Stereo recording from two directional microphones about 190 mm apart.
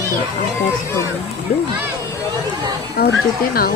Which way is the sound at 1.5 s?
40° left (ahead or behind).